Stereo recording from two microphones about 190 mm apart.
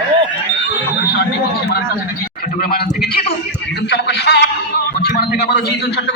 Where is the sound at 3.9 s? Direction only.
65° left (ahead or behind).